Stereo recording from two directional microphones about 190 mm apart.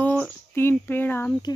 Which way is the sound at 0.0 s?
10° left (ahead or behind).